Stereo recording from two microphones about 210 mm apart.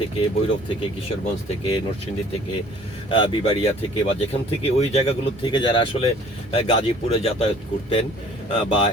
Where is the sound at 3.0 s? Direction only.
25° left (ahead or behind).